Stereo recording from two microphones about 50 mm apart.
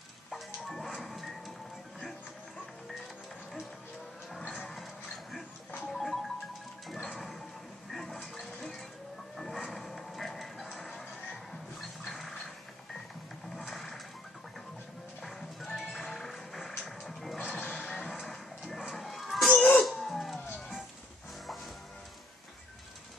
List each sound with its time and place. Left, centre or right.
0.3 s music: centre
5.9 s music: centre
7.9 s a sound: centre
12.1 s a sound: centre
13.6 s mechanisms: centre
15.2 s music: centre
17.4 s music: centre
18.1 s a sound: centre
19.8 s music: centre